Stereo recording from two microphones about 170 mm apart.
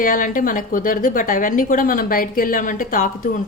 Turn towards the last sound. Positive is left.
turn(degrees=55)  # may be behind; listen again after turning